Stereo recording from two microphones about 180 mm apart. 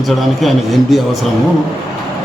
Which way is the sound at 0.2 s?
Centre (ahead or behind).